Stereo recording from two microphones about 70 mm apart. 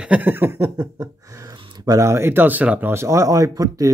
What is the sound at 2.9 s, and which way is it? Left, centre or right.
Speech, right.